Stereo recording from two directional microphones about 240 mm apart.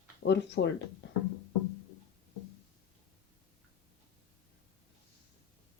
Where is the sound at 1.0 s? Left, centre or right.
Left.